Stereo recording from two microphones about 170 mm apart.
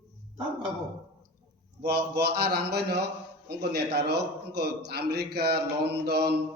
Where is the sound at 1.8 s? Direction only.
70° right (ahead or behind).